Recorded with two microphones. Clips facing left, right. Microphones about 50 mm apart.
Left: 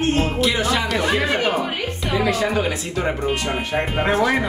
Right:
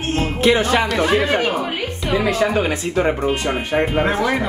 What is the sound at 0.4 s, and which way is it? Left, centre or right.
Speech, right.